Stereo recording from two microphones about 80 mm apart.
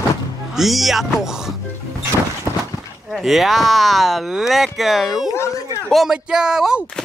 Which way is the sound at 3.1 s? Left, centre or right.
Centre.